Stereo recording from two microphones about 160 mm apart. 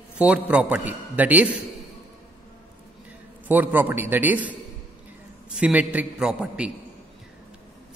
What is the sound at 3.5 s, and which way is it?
A man's voice, 10° right (ahead or behind).